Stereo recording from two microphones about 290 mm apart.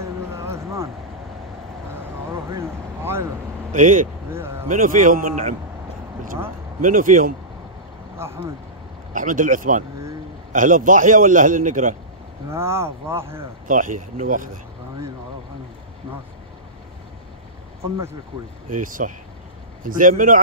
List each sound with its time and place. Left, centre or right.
0.0 s a sound: centre
2.5 s vehicle: centre
3.7 s a man's voice: right
4.3 s vehicle: centre
4.6 s a man's voice: right
6.8 s a man's voice: right
8.2 s speech: centre
9.1 s a man's voice: right
12.4 s speech: centre
13.7 s a man's voice: right
18.8 s a man's voice: right